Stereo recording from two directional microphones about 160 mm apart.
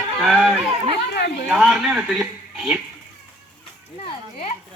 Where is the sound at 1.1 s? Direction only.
75° left (ahead or behind).